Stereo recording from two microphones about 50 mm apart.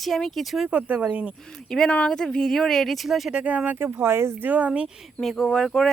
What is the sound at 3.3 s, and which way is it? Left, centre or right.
Speech, right.